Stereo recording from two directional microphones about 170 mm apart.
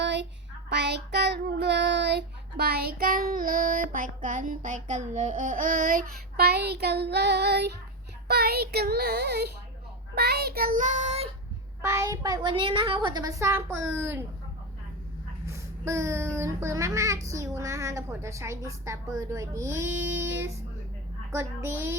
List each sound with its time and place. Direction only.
0.0 s a sound: 90° right
0.7 s child singing: 85° right; by 11.3 s 40° right (ahead or behind)
11.8 s a woman's voice: 15° right (ahead or behind)
15.4 s a child's voice: 15° right (ahead or behind)